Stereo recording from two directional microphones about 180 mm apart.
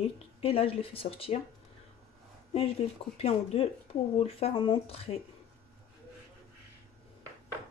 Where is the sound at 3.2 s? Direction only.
35° left (ahead or behind).